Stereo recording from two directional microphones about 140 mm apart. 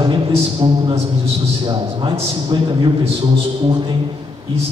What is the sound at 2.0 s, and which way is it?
Speech, 35° right (ahead or behind).